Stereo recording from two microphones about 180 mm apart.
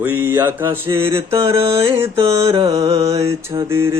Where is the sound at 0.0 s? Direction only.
10° right (ahead or behind).